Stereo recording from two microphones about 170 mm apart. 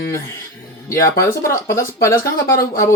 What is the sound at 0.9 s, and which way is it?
Speech, 15° left (ahead or behind).